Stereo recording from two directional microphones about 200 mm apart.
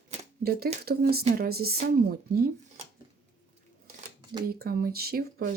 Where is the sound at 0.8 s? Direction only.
50° right (ahead or behind).